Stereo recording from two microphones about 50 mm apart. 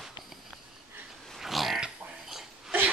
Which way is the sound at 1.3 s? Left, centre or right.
Centre.